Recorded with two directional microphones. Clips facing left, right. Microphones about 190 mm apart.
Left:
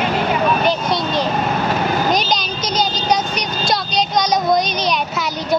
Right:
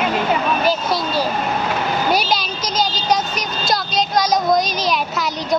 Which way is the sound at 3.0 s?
Centre (ahead or behind).